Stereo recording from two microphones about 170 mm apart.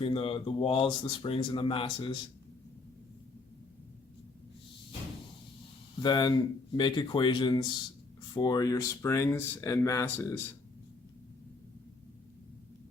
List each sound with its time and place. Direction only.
0.0 s speech: 30° left (ahead or behind)
6.0 s speech: 25° left (ahead or behind)